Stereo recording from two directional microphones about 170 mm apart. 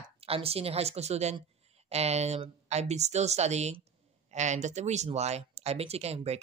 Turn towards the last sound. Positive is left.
turn(degrees=-40)  # may be behind; listen again after turning